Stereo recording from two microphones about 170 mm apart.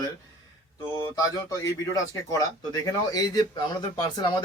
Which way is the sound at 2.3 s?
20° left (ahead or behind).